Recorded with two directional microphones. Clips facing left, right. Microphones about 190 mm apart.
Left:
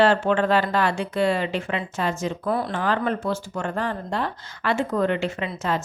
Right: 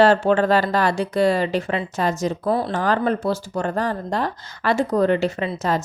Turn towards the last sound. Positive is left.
turn(degrees=-40)  # may be behind; listen again after turning